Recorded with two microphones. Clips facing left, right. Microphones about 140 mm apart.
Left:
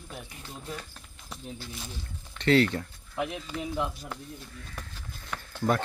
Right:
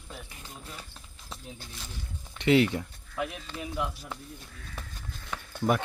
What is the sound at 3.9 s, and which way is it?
Speech, 5° right (ahead or behind).